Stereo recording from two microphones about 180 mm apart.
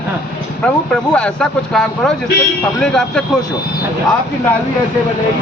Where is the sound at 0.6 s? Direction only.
5° left (ahead or behind).